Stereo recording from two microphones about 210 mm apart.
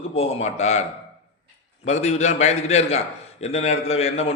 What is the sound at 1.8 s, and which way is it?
A man's voice, 30° left (ahead or behind).